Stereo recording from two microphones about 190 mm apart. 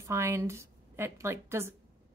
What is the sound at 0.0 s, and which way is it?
A woman's voice, 15° right (ahead or behind).